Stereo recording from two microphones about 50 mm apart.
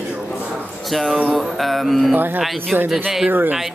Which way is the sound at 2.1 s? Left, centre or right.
Right.